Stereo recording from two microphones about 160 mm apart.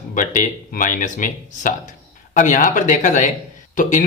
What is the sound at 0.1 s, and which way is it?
Speech, 55° left (ahead or behind).